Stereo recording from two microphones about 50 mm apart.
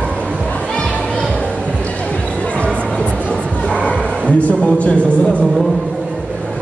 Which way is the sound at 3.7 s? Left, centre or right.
Left.